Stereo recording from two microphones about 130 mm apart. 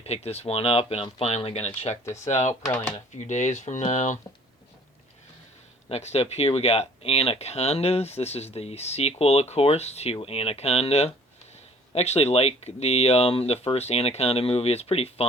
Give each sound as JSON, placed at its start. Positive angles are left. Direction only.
{"t": 0.0, "sound": "speech", "side_deg": 55}
{"t": 5.9, "sound": "speech", "side_deg": 55}